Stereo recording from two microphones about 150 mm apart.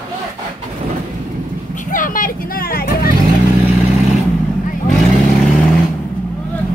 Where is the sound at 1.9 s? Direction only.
65° left (ahead or behind); by 3.1 s 80° left.